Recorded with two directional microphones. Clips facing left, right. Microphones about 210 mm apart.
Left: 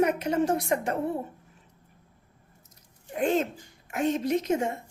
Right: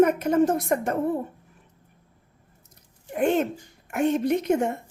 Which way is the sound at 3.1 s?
60° right (ahead or behind).